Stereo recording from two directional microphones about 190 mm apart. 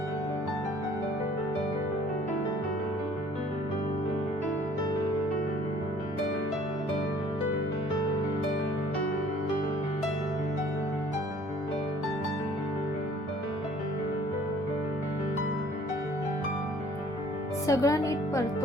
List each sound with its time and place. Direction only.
17.7 s speech: 15° left (ahead or behind)